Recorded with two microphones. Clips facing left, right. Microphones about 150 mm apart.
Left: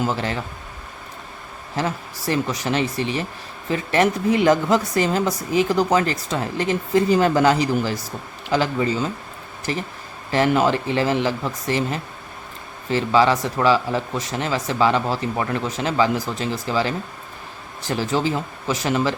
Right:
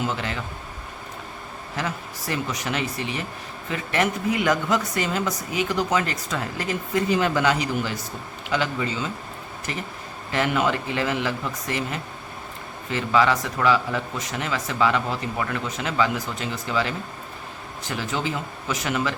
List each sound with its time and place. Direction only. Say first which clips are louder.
0.1 s a woman's voice: left 4 dB; 35° left (ahead or behind)
1.7 s a woman's voice: left 5 dB; 30° left (ahead or behind)